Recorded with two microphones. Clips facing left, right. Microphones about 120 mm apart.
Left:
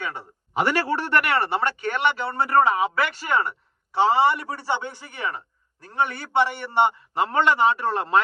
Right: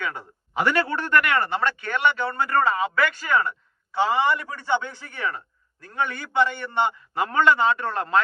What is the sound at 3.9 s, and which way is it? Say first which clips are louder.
A man's voice: left 3 dB; 30° left (ahead or behind).